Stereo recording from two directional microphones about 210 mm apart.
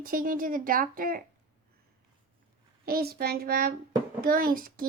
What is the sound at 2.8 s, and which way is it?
A child's voice, 45° right (ahead or behind).